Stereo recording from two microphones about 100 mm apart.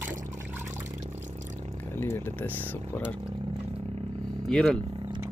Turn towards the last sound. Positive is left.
turn(degrees=5)  # may be behind; listen again after turning